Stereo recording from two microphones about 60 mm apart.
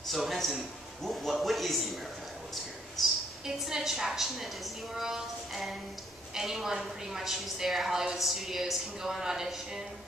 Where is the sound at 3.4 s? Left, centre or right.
Centre.